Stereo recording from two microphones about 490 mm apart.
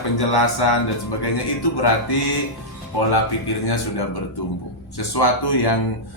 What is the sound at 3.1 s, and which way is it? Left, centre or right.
Speech, left.